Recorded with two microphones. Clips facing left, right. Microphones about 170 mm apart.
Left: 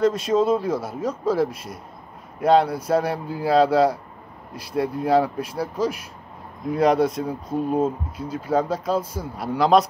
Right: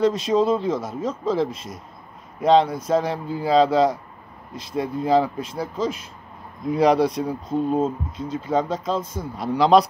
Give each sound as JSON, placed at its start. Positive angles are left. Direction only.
{"t": 0.0, "sound": "speech", "side_deg": 50}
{"t": 0.3, "sound": "speech", "side_deg": 5}